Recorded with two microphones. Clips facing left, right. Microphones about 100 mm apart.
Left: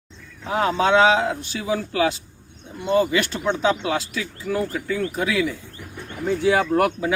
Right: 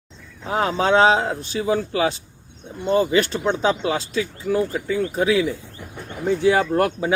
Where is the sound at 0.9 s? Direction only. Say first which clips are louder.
Right 2 dB; 35° right (ahead or behind).